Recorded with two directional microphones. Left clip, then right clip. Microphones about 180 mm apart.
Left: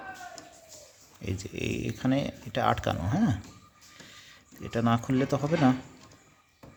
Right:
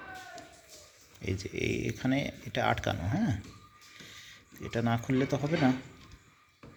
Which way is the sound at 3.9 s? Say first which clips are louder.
Right 1 dB; 20° left (ahead or behind).